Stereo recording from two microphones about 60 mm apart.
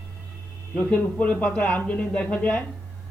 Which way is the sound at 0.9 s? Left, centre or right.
Left.